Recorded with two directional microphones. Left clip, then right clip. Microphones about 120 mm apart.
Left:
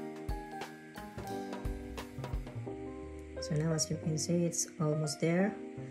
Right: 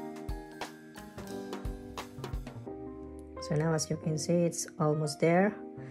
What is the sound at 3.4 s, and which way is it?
Speech, 5° left (ahead or behind).